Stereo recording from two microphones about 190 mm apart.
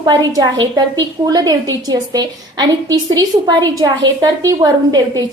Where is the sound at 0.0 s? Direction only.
20° right (ahead or behind).